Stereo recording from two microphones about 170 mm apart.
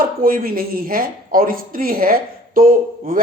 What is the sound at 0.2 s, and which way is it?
Speech, 60° right (ahead or behind).